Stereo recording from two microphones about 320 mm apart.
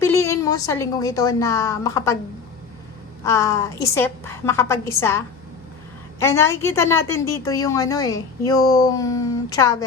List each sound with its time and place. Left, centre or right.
0.0 s a woman's voice: centre
3.2 s a woman's voice: centre